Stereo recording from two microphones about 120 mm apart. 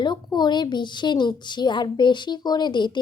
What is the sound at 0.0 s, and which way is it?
A woman's voice, 40° left (ahead or behind).